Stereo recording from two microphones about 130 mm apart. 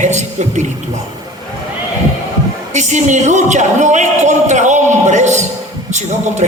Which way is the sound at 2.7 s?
65° right (ahead or behind).